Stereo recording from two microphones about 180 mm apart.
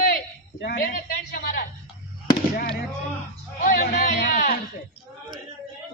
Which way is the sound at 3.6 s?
50° left (ahead or behind).